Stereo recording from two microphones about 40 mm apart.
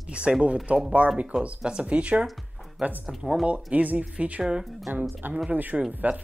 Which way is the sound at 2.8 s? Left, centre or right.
Right.